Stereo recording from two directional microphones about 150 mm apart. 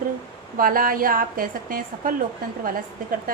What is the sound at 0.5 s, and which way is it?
Speech, 70° right (ahead or behind).